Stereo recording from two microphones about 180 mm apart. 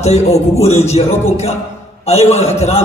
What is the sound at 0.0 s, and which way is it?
A man's voice, 35° left (ahead or behind).